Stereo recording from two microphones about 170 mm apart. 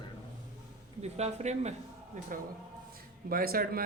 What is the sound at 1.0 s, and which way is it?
A man's voice, 40° right (ahead or behind).